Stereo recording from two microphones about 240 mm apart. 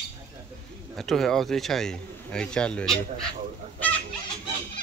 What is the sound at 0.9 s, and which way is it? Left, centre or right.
A man's voice, centre.